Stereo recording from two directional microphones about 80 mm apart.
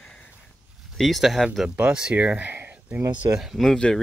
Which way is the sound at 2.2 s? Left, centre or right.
Right.